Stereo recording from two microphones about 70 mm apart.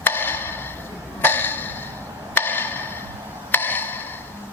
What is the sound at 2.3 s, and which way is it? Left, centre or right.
Wood block, left.